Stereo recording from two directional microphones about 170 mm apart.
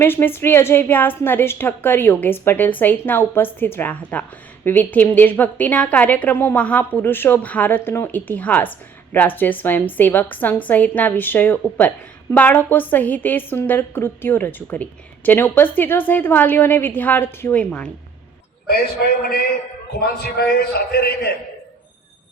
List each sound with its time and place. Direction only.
0.0 s a woman's voice: 15° left (ahead or behind)
19.0 s a man's voice: 80° left
20.0 s a man's voice: 65° left (ahead or behind)